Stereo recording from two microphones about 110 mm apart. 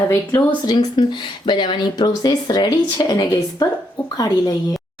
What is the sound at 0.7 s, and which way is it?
Speech, 45° left (ahead or behind).